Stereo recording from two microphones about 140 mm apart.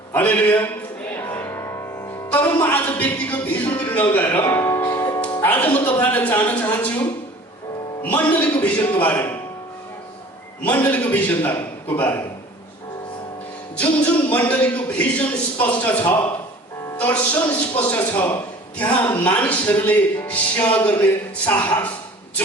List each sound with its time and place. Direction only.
0.1 s a man's voice: 10° left (ahead or behind)
1.1 s music: 15° left (ahead or behind)
2.6 s a man's voice: 10° left (ahead or behind)
5.4 s a man's voice: 10° left (ahead or behind)
10.6 s a man's voice: 10° left (ahead or behind)
13.7 s a man's voice: 10° left (ahead or behind)
17.0 s a man's voice: 15° left (ahead or behind)